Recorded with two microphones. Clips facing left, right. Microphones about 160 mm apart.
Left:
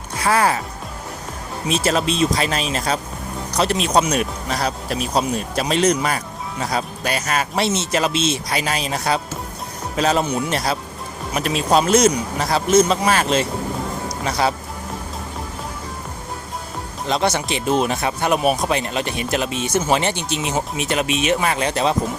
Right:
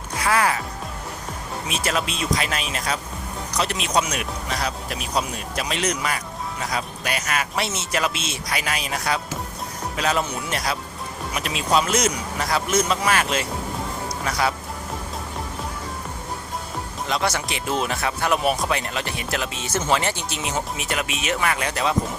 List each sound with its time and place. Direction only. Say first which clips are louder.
0.2 s speech: left 3 dB; 30° left (ahead or behind)
1.6 s speech: left 7 dB; 30° left (ahead or behind)
11.3 s speech: left 4 dB; 40° left (ahead or behind)
17.1 s speech: left 5 dB; 25° left (ahead or behind)